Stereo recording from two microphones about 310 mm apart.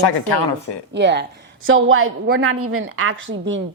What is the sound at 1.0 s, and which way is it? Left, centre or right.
A woman's voice, right.